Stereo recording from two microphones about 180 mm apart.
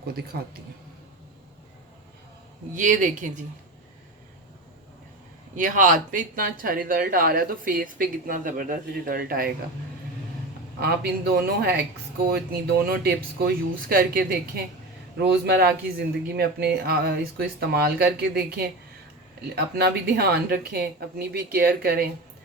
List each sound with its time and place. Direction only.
0.0 s speech: 60° right (ahead or behind)
2.7 s speech: 45° right (ahead or behind)
5.5 s speech: 45° right (ahead or behind)
10.8 s speech: 65° right (ahead or behind)
15.2 s speech: 70° right (ahead or behind)